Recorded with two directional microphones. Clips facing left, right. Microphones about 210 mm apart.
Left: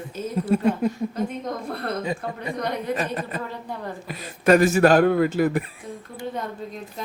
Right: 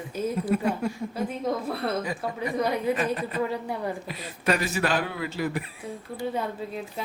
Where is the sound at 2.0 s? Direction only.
25° left (ahead or behind).